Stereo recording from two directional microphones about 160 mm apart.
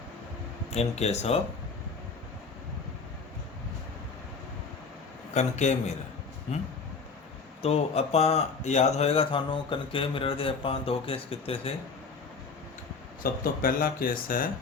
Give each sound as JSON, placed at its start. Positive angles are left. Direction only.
{"t": 0.7, "sound": "speech", "side_deg": 40}
{"t": 5.3, "sound": "a man's voice", "side_deg": 45}
{"t": 7.6, "sound": "speech", "side_deg": 40}
{"t": 13.4, "sound": "speech", "side_deg": 65}